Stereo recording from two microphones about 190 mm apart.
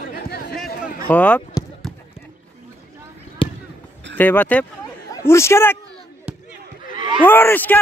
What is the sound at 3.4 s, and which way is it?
Basketball bounce, 25° left (ahead or behind).